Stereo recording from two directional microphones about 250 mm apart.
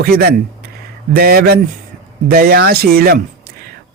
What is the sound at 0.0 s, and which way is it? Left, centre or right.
Speech, right.